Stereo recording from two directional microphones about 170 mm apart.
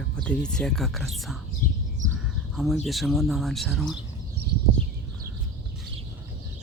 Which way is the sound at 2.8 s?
Centre (ahead or behind).